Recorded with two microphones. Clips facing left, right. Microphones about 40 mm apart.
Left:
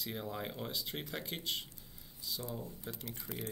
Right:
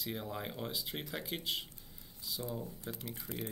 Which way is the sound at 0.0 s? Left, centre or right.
Centre.